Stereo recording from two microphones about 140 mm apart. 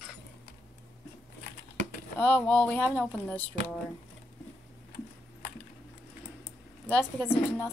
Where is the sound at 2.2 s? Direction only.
10° left (ahead or behind).